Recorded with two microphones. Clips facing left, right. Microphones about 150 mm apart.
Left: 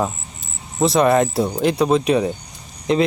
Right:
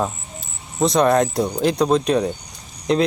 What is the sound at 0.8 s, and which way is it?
Speech, 5° left (ahead or behind).